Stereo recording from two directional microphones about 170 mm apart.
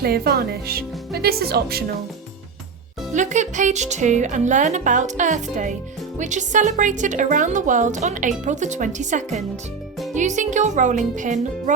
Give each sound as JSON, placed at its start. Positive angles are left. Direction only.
{"t": 0.0, "sound": "speech", "side_deg": -65}
{"t": 3.1, "sound": "speech", "side_deg": -45}